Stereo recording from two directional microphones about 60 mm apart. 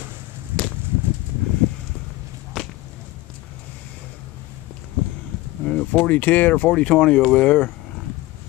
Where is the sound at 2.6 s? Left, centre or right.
Centre.